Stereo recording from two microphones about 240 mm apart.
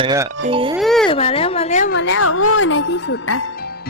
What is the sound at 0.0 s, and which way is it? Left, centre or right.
Speech, centre.